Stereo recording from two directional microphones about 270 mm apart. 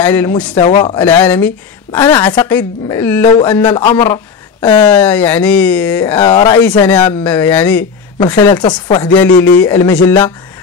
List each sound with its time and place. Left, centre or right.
0.0 s speech: centre
1.0 s speech: centre